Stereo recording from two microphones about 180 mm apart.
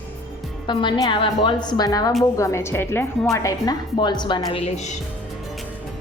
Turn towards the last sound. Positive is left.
turn(degrees=40)  # may be behind; listen again after turning